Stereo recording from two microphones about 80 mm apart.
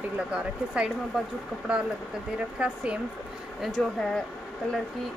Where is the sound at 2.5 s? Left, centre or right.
Centre.